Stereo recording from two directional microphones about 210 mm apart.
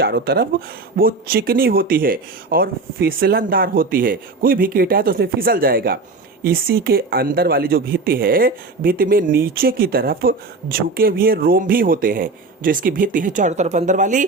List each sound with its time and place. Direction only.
0.0 s speech: 50° right (ahead or behind)